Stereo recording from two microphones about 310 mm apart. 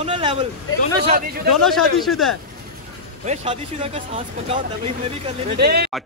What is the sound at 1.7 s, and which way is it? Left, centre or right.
Speech, centre.